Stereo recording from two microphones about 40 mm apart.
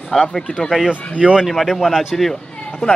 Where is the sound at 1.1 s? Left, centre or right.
Right.